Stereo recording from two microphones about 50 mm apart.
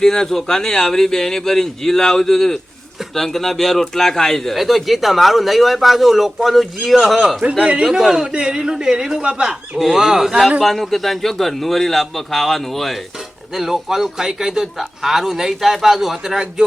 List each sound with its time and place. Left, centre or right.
0.0 s a man's voice: centre
7.6 s a man's voice: centre
7.9 s speech: centre
9.7 s a man's voice: centre
13.1 s speech: centre